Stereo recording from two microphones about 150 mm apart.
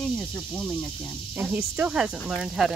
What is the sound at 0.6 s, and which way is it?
Speech, 10° left (ahead or behind).